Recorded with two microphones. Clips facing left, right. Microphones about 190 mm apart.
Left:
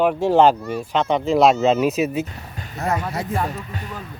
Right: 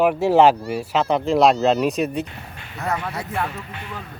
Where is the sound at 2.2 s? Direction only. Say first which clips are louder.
Left 2 dB; 40° left (ahead or behind).